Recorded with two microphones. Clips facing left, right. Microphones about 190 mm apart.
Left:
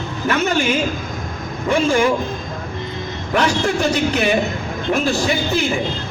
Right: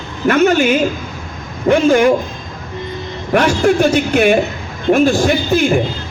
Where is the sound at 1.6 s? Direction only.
60° right (ahead or behind).